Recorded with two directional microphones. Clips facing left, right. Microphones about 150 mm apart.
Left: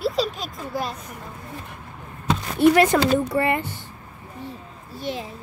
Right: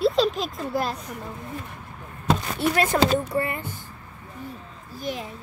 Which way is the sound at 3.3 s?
80° left.